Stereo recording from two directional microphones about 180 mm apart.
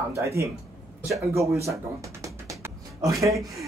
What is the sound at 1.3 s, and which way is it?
Speech, 15° right (ahead or behind).